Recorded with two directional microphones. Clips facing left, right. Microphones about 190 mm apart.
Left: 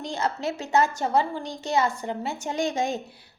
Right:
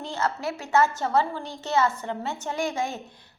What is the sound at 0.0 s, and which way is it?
A woman's voice, 15° left (ahead or behind).